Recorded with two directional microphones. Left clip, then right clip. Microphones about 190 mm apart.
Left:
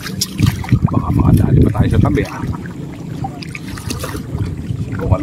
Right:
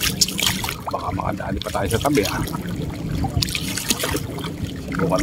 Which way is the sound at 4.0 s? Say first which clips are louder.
Right 1 dB; 20° right (ahead or behind).